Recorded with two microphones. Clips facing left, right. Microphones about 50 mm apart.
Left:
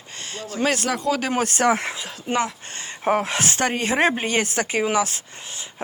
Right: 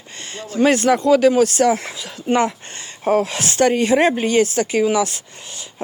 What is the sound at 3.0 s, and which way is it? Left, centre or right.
Speech, left.